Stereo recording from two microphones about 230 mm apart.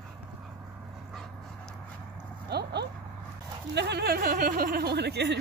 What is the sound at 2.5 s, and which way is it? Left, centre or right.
Dog, right.